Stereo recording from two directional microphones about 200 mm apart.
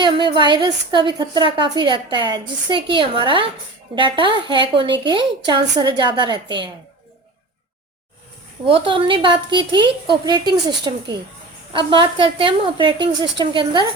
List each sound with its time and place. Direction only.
0.0 s a woman's voice: 25° right (ahead or behind)
8.6 s a woman's voice: 25° right (ahead or behind)